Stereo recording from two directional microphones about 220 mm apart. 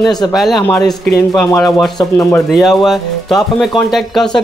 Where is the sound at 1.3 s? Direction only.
15° left (ahead or behind).